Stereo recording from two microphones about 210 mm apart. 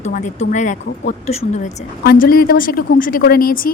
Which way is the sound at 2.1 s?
45° left (ahead or behind).